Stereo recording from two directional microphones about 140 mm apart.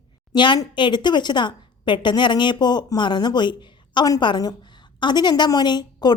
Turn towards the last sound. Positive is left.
turn(degrees=30)  # may be behind; listen again after turning